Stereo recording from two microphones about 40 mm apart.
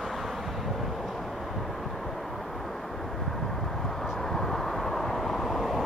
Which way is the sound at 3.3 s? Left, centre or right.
Centre.